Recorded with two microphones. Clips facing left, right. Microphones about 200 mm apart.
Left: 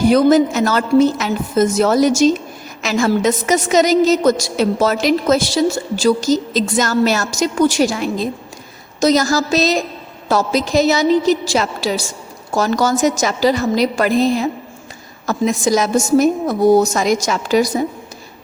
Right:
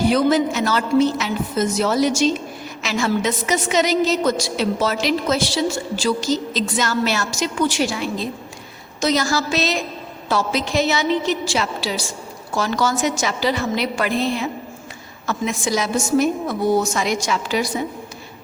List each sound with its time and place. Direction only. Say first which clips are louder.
0.0 s a woman's voice: left 5 dB; 45° left (ahead or behind)